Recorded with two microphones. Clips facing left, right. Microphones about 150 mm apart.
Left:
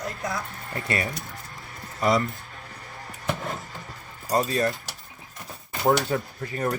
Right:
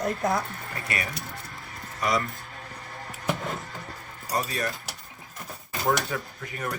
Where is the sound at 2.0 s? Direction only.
25° left (ahead or behind).